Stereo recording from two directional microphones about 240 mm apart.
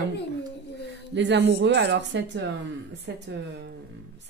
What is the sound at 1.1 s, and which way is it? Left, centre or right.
Speech, right.